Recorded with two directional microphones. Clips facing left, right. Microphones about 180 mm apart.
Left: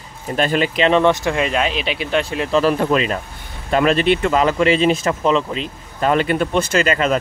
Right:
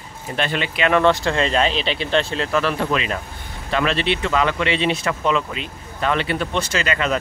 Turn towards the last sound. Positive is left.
turn(degrees=40)  # may be behind; listen again after turning